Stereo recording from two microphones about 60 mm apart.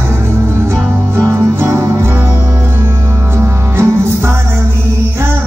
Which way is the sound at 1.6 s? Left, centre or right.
Right.